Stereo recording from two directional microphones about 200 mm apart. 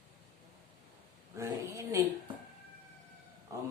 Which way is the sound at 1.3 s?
15° right (ahead or behind).